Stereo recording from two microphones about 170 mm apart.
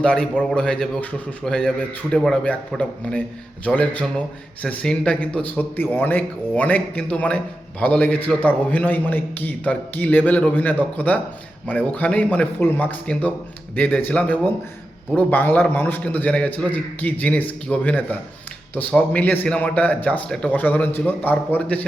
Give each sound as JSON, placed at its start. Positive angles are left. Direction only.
{"t": 0.0, "sound": "a man's voice", "side_deg": 5}